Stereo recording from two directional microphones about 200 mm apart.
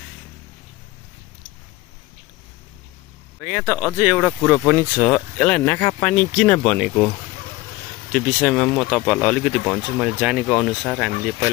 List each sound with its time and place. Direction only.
3.3 s speech: 5° right (ahead or behind)
5.0 s speech: 5° left (ahead or behind)